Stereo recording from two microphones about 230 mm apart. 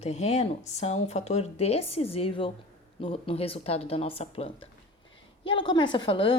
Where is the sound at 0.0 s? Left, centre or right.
Left.